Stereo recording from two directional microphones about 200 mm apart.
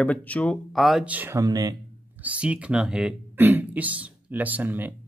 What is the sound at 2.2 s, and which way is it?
Speech, 5° right (ahead or behind).